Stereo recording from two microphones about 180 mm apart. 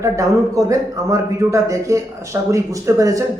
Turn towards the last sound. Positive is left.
turn(degrees=-20)  # may be behind; listen again after turning